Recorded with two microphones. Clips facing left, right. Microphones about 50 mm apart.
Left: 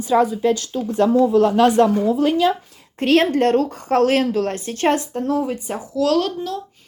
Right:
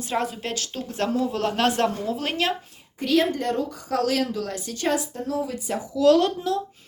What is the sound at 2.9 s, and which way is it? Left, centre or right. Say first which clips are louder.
Speech: left 6 dB; left.